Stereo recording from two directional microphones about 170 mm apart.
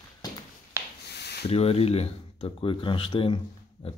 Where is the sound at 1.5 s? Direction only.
35° left (ahead or behind).